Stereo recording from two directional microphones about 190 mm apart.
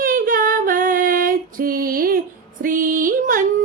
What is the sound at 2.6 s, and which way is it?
Music, 45° right (ahead or behind).